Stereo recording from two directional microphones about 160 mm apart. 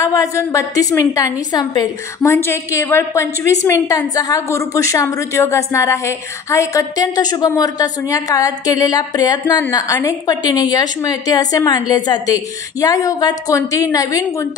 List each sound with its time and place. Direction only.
0.0 s a woman's voice: 20° left (ahead or behind)